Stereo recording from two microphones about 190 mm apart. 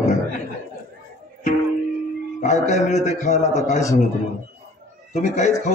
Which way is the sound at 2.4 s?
40° left (ahead or behind).